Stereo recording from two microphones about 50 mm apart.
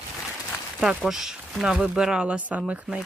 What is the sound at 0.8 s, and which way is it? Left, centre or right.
Speech, centre.